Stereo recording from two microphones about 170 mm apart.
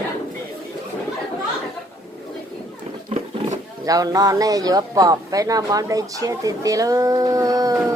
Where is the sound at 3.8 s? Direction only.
20° right (ahead or behind).